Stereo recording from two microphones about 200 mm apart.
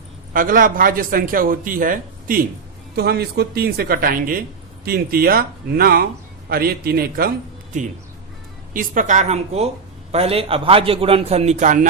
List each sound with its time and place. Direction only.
0.3 s speech: 45° right (ahead or behind)
8.7 s a man's voice: 40° right (ahead or behind)